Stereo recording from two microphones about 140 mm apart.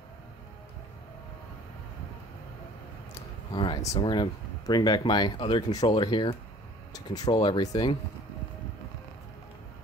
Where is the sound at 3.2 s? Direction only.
35° left (ahead or behind).